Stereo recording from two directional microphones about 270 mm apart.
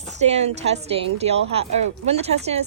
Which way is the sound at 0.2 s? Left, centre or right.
Right.